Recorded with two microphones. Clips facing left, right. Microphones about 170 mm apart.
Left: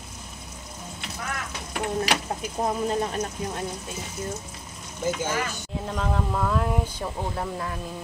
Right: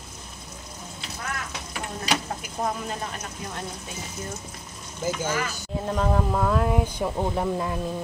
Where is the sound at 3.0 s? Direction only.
35° left (ahead or behind).